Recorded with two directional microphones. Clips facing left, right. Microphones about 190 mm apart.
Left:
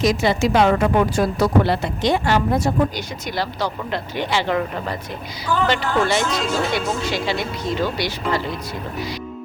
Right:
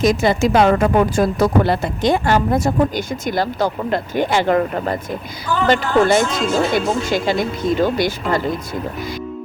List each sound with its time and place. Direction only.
0.0 s speech: 50° right (ahead or behind)